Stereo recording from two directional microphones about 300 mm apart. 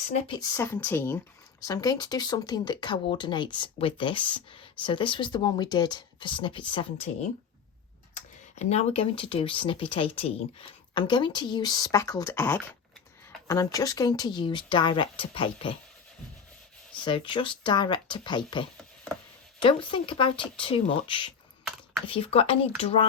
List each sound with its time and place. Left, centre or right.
0.3 s speech: centre
8.1 s speech: left
16.9 s speech: centre
19.6 s speech: centre